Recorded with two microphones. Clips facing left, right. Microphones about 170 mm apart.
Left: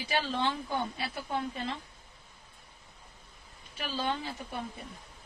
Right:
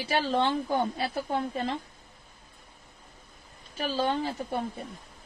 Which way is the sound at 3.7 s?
40° right (ahead or behind).